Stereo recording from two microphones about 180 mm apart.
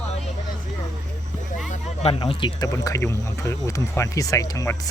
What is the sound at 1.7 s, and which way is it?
Speech, 35° left (ahead or behind).